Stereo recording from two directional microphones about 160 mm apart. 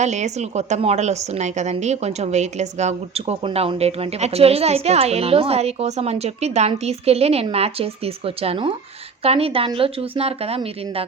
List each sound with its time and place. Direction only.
0.0 s a woman's voice: 45° right (ahead or behind)